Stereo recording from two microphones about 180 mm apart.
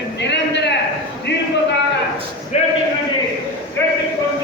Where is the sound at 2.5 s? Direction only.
40° left (ahead or behind).